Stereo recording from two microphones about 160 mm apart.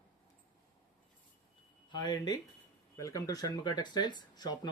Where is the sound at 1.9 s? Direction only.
25° left (ahead or behind).